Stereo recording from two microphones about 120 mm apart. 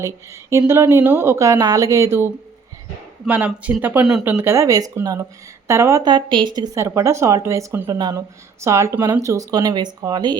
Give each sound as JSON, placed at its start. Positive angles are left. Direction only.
{"t": 0.7, "sound": "speech", "side_deg": -20}
{"t": 6.0, "sound": "speech", "side_deg": -35}
{"t": 6.7, "sound": "speech", "side_deg": -25}